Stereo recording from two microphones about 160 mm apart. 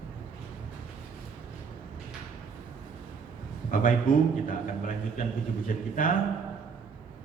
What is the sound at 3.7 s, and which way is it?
Speech, 60° left (ahead or behind).